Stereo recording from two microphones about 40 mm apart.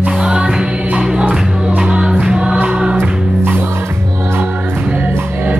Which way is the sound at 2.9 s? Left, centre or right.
Right.